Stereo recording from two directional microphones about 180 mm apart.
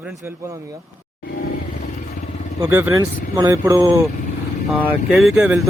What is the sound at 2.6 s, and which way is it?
Speech, 10° right (ahead or behind).